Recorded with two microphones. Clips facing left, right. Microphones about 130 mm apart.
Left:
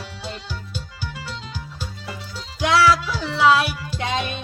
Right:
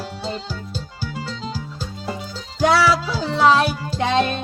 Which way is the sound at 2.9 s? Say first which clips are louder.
Even; 30° right (ahead or behind).